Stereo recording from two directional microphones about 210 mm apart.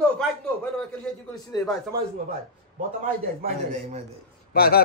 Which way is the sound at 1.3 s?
20° left (ahead or behind).